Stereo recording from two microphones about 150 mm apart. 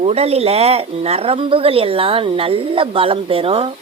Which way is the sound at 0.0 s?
45° right (ahead or behind).